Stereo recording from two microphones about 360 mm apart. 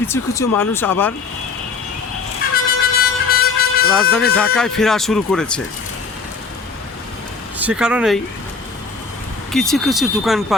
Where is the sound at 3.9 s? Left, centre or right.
Centre.